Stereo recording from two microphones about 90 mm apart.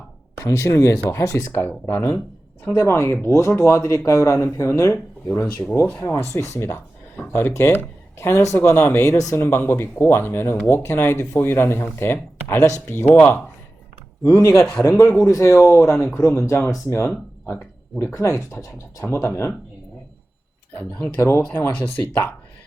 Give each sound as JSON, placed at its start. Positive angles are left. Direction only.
{"t": 0.3, "sound": "speech", "side_deg": 30}
{"t": 2.8, "sound": "speech", "side_deg": 30}
{"t": 12.5, "sound": "speech", "side_deg": 35}
{"t": 14.3, "sound": "speech", "side_deg": 30}
{"t": 18.1, "sound": "speech", "side_deg": 35}
{"t": 21.2, "sound": "speech", "side_deg": 30}